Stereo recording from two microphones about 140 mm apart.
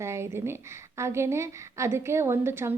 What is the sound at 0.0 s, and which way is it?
A woman's voice, 20° right (ahead or behind).